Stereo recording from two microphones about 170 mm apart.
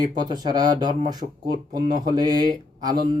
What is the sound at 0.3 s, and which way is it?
Speech, 25° right (ahead or behind).